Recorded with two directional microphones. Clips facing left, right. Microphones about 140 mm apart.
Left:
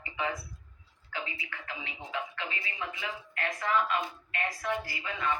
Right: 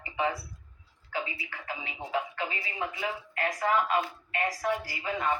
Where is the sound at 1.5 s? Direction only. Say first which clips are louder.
Right 3 dB; 40° right (ahead or behind).